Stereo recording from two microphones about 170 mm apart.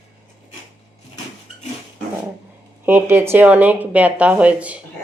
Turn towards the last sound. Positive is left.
turn(degrees=-10)  # may be behind; listen again after turning